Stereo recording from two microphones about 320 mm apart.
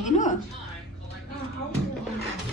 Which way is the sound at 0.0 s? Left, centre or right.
Left.